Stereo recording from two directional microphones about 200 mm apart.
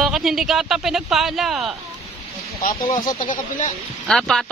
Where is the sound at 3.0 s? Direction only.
40° left (ahead or behind).